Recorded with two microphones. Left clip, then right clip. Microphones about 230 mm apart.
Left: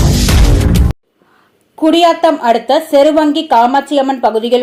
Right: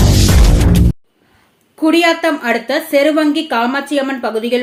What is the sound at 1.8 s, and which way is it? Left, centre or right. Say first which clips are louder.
A woman's voice: left 3 dB; centre.